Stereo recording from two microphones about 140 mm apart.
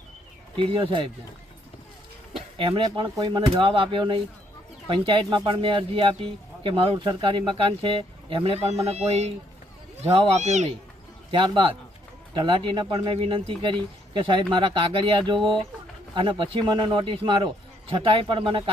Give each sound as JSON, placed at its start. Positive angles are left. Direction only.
{"t": 0.5, "sound": "speech", "side_deg": -40}
{"t": 2.3, "sound": "speech", "side_deg": -40}
{"t": 11.3, "sound": "speech", "side_deg": -35}